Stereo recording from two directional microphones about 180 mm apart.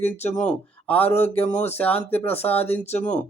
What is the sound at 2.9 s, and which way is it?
Speech, 40° left (ahead or behind).